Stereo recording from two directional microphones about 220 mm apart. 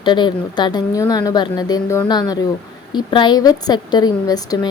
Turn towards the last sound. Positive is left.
turn(degrees=15)  # may be behind; listen again after turning